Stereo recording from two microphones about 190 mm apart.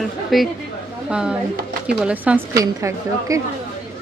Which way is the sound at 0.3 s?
Centre (ahead or behind).